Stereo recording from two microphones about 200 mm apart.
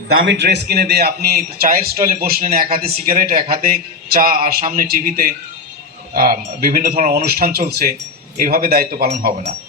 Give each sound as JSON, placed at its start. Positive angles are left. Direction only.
{"t": 0.1, "sound": "a man's voice", "side_deg": -70}
{"t": 9.0, "sound": "speech", "side_deg": -35}